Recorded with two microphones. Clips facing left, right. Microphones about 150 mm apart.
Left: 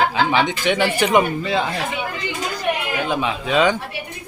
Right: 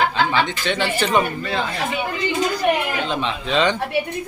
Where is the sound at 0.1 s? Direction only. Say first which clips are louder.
Left 1 dB; 15° left (ahead or behind).